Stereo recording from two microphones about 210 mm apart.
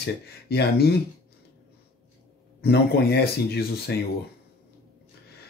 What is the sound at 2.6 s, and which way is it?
Speech, 50° left (ahead or behind).